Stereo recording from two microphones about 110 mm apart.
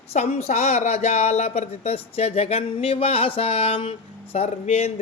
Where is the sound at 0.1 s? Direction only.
75° left (ahead or behind).